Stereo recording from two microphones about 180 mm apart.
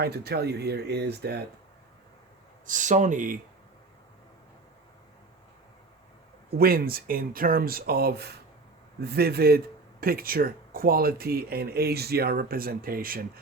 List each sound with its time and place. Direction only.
0.0 s speech: 65° right (ahead or behind)
2.6 s speech: 45° right (ahead or behind)
6.6 s speech: 55° right (ahead or behind)